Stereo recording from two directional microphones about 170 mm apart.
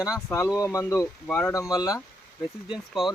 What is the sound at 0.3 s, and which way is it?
Speech, 15° left (ahead or behind).